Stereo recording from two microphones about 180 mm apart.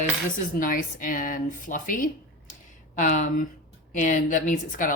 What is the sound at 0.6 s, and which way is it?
Speech, 50° left (ahead or behind).